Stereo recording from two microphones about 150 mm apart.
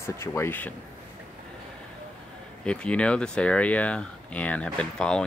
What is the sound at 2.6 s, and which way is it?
Speech, 5° left (ahead or behind).